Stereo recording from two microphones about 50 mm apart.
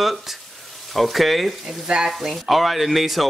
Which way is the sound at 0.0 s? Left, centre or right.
Centre.